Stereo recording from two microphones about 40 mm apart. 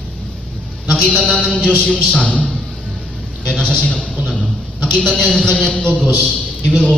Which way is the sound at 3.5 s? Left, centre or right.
Left.